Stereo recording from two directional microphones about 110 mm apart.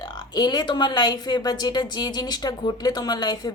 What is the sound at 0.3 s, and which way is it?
A woman's voice, 40° left (ahead or behind).